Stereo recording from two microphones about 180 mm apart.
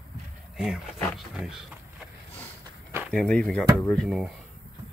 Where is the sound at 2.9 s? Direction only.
10° right (ahead or behind).